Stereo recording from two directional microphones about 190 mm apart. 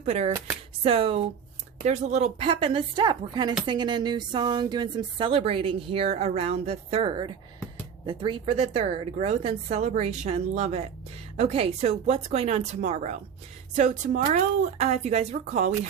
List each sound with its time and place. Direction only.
0.0 s a woman's voice: 35° right (ahead or behind)